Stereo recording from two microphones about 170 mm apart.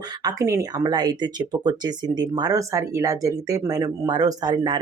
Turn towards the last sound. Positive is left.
turn(degrees=-25)  # may be behind; listen again after turning